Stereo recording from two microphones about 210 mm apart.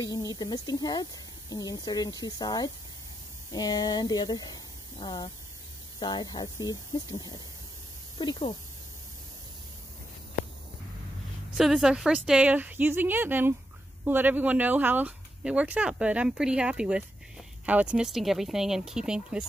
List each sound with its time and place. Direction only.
0.0 s speech: 15° left (ahead or behind)
11.5 s speech: centre (ahead or behind)